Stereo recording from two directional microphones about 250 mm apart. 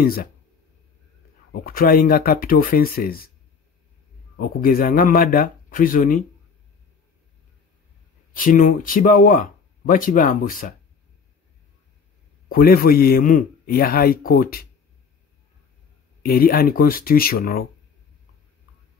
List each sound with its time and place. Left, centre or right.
0.0 s a man's voice: left
1.5 s a man's voice: left
4.4 s a man's voice: left
8.4 s a man's voice: left
12.4 s a man's voice: left
16.3 s a man's voice: left